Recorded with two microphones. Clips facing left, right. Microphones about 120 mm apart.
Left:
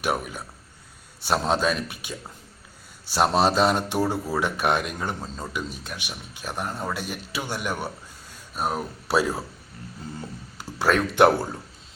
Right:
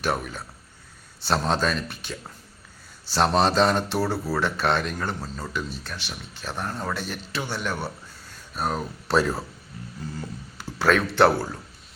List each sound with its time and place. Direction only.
0.0 s a man's voice: 10° left (ahead or behind)
10.2 s a sound: 15° left (ahead or behind)
11.0 s a man's voice: 15° left (ahead or behind)